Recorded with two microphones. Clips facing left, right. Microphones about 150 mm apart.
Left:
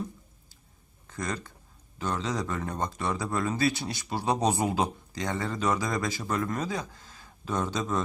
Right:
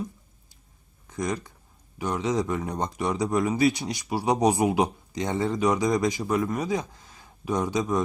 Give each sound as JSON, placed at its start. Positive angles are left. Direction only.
{"t": 1.0, "sound": "speech", "side_deg": -15}